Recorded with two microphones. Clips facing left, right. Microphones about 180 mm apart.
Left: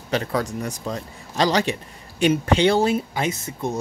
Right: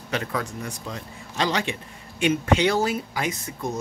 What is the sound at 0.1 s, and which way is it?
A man's voice, 35° left (ahead or behind).